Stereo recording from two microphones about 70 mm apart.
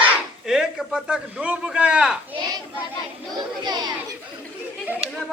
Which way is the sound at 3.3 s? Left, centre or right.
Right.